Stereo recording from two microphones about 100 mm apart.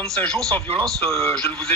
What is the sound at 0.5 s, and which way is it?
Speech, 20° left (ahead or behind).